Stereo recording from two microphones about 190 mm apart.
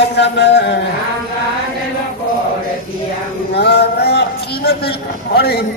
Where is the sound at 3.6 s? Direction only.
60° left (ahead or behind).